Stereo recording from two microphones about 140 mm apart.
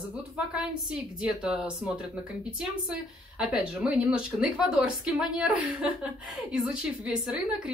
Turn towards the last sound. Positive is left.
turn(degrees=-5)  # may be behind; listen again after turning